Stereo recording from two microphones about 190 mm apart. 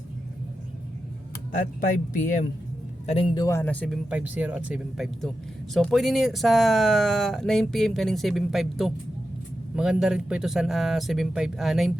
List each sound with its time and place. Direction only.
3.1 s a man's voice: 30° left (ahead or behind)
3.4 s speech: 10° left (ahead or behind)